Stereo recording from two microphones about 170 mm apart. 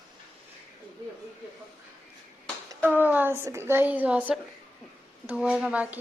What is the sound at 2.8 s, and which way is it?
A woman's voice, 10° right (ahead or behind).